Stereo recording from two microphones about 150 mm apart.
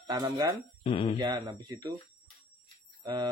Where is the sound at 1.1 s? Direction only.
25° right (ahead or behind).